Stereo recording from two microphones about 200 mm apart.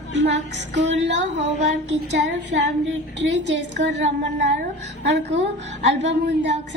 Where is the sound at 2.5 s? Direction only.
65° right (ahead or behind).